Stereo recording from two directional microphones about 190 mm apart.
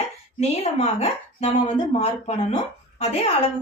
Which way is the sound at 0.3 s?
35° left (ahead or behind).